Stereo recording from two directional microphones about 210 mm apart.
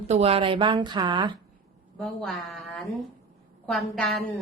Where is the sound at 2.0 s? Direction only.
Centre (ahead or behind).